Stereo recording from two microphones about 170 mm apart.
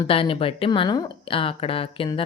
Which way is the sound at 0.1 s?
30° left (ahead or behind).